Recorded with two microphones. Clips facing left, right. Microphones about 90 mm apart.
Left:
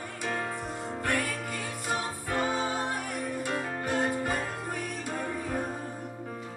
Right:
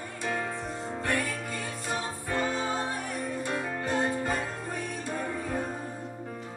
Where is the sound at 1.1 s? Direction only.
15° left (ahead or behind).